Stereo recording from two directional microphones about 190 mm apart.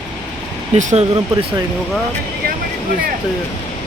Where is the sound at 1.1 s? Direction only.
25° right (ahead or behind).